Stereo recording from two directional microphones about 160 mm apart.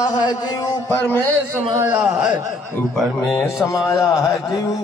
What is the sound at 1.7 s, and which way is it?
Speech, 15° right (ahead or behind).